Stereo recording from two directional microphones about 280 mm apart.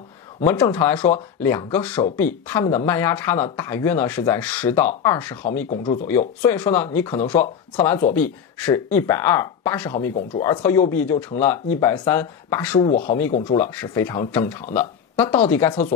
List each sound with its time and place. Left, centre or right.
0.4 s speech: centre
12.9 s speech: left